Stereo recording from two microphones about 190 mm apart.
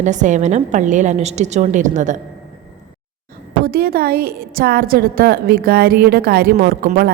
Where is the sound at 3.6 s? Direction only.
50° right (ahead or behind).